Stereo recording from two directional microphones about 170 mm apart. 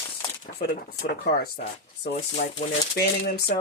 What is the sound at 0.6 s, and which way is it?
Speech, 65° left (ahead or behind).